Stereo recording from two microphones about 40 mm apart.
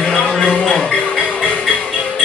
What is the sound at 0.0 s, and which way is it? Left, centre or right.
Music, left.